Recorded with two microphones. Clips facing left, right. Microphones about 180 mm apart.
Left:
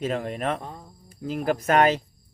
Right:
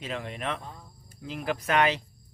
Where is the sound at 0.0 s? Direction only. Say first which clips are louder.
Left 7 dB; 45° left (ahead or behind).